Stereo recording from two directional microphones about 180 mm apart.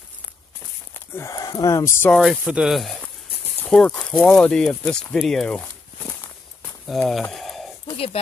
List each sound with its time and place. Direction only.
0.9 s speech: 15° left (ahead or behind)
2.1 s speech: 5° right (ahead or behind)
6.9 s speech: centre (ahead or behind)
7.8 s a sound: 30° left (ahead or behind)